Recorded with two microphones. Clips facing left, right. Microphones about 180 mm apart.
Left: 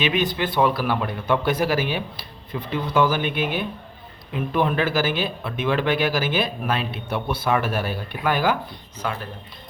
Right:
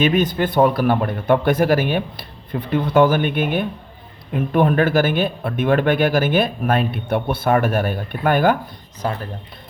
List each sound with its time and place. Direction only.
0.0 s speech: 45° right (ahead or behind)
9.0 s speech: 40° right (ahead or behind)